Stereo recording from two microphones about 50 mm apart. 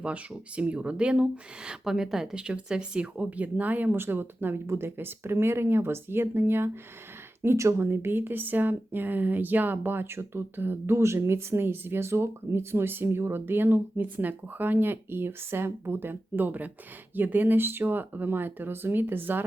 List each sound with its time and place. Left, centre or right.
0.0 s speech: right
1.8 s speech: centre
3.2 s speech: right
3.9 s speech: right
4.6 s speech: right
4.9 s speech: right
7.5 s speech: right
7.8 s speech: right